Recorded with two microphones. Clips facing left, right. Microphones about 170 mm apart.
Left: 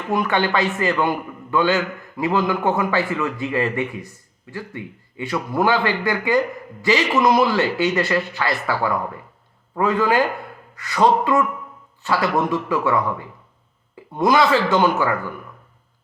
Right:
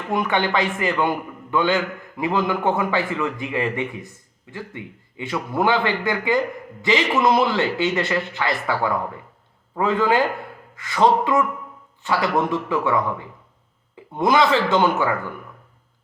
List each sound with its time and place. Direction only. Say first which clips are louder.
0.1 s a man's voice: left 1 dB; 20° right (ahead or behind)